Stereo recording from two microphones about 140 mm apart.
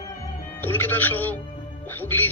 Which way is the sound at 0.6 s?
15° left (ahead or behind).